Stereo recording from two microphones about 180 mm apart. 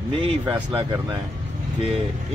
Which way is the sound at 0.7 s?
25° right (ahead or behind).